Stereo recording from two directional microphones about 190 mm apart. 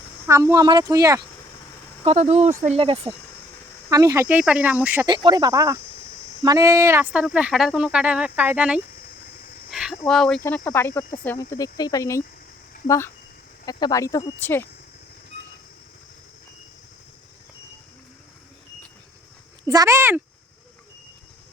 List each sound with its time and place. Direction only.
0.3 s speech: 15° right (ahead or behind)
2.0 s speech: 35° right (ahead or behind)
3.8 s speech: 20° right (ahead or behind)
5.0 s speech: 25° right (ahead or behind); by 8.8 s 5° right (ahead or behind)
9.6 s a sound: centre (ahead or behind)
10.1 s speech: 5° left (ahead or behind)
13.7 s speech: 20° left (ahead or behind)
19.6 s speech: 20° right (ahead or behind)